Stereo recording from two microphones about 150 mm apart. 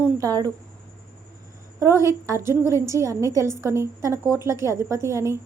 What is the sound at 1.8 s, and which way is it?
A woman's voice, 20° right (ahead or behind).